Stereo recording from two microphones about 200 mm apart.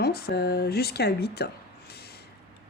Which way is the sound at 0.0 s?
50° left (ahead or behind).